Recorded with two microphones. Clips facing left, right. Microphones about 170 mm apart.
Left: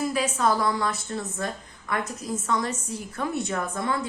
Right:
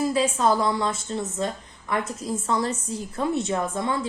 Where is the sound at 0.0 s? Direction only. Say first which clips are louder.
Right 3 dB; 25° right (ahead or behind).